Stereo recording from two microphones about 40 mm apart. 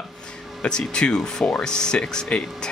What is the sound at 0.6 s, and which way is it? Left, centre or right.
Speech, left.